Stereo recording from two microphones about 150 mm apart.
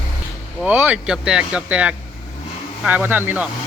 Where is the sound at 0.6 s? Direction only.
10° right (ahead or behind).